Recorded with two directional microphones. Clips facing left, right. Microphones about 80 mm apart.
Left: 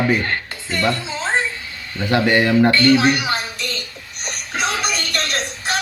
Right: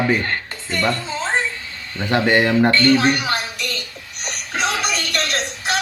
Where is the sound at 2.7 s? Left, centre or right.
Centre.